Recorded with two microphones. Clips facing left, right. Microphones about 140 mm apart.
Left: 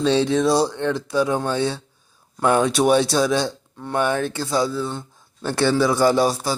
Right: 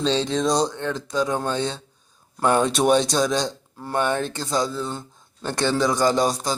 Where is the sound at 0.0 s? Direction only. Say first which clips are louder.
Left 4 dB; 10° left (ahead or behind).